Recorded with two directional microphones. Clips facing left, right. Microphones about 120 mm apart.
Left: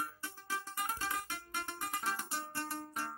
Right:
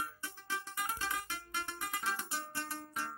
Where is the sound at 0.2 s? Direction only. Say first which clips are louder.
Even; 35° left (ahead or behind).